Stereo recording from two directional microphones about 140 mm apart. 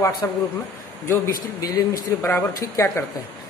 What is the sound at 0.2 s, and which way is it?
A man's voice, 25° left (ahead or behind).